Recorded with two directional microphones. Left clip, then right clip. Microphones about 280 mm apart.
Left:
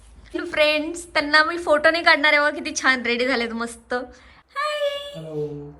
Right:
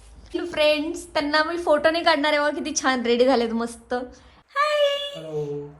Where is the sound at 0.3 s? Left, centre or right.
Centre.